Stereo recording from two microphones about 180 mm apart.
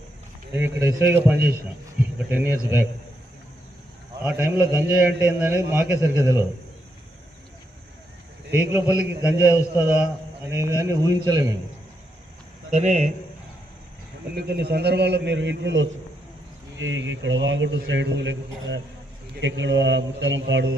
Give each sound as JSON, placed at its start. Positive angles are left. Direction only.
{"t": 0.5, "sound": "a man's voice", "side_deg": -10}
{"t": 4.2, "sound": "a man's voice", "side_deg": -10}
{"t": 8.5, "sound": "a man's voice", "side_deg": -10}
{"t": 12.7, "sound": "a man's voice", "side_deg": -40}
{"t": 14.3, "sound": "a man's voice", "side_deg": -60}